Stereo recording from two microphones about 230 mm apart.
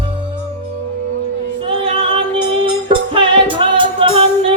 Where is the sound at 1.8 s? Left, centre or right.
Right.